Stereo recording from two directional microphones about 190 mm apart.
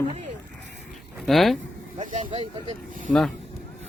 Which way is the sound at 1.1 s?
Centre (ahead or behind).